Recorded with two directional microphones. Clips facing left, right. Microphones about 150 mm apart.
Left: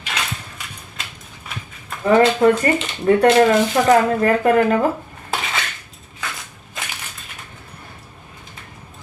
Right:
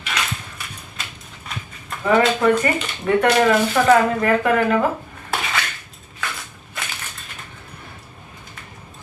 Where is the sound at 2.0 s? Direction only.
30° left (ahead or behind).